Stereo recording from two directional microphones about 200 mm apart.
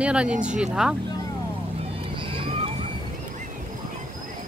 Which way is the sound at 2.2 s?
25° right (ahead or behind).